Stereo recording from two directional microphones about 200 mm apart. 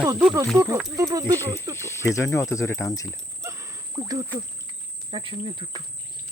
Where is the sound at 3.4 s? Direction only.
15° right (ahead or behind).